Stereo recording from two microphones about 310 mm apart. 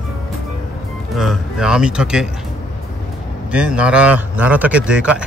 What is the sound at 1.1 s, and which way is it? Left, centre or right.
Speech, centre.